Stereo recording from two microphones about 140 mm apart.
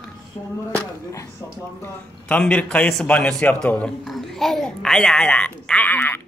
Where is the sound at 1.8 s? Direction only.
15° left (ahead or behind).